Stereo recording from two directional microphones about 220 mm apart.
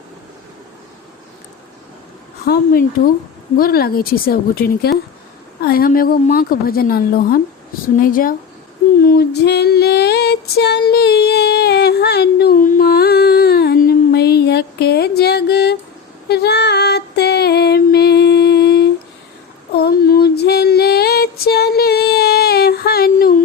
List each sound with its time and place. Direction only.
2.5 s a woman's voice: 45° left (ahead or behind)
9.0 s female singing: 45° left (ahead or behind)